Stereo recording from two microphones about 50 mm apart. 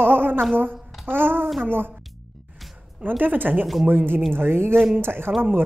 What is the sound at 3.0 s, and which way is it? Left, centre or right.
A woman's voice, right.